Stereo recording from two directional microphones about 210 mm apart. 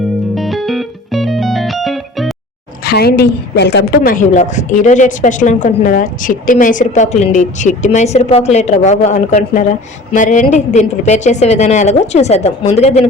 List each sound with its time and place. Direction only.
0.3 s music: centre (ahead or behind)
2.8 s a woman's voice: 50° left (ahead or behind); by 13.1 s 30° left (ahead or behind)